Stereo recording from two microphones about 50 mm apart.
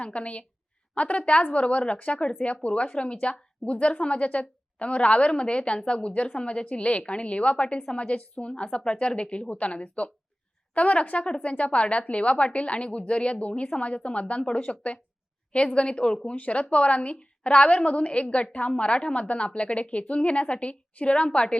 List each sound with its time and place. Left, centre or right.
0.0 s a woman's voice: left